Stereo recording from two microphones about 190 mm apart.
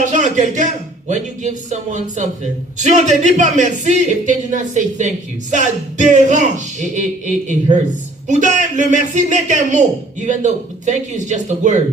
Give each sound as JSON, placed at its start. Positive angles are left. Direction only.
{"t": 0.0, "sound": "a man's voice", "side_deg": -40}